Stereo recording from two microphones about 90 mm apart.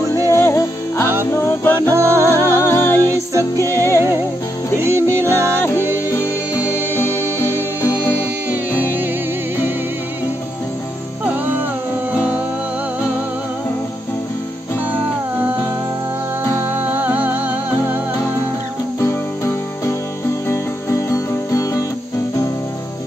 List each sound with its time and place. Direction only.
0.3 s music: 30° left (ahead or behind)
1.8 s music: 30° right (ahead or behind)
2.6 s music: 25° left (ahead or behind)
3.6 s music: 35° right (ahead or behind)
6.6 s music: 20° right (ahead or behind)
7.8 s music: 30° left (ahead or behind)
16.5 s music: 20° right (ahead or behind)
18.9 s music: 30° left (ahead or behind)